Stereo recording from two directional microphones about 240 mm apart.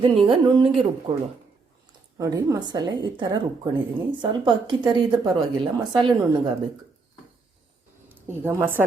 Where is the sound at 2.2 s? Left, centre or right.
Centre.